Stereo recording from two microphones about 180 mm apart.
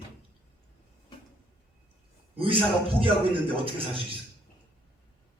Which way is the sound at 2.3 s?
30° right (ahead or behind).